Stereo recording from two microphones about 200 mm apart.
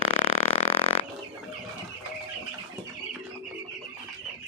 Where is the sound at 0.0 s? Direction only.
35° left (ahead or behind).